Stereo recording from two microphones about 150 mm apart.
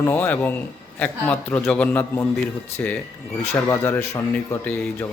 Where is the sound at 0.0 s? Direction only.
15° left (ahead or behind).